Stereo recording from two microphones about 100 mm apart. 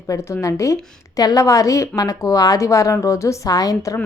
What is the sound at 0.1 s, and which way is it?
A woman's voice, 30° left (ahead or behind).